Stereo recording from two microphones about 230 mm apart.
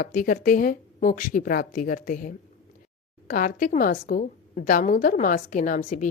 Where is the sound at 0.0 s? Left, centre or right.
Left.